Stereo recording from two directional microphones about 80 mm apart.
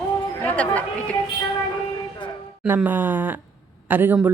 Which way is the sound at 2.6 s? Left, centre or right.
Right.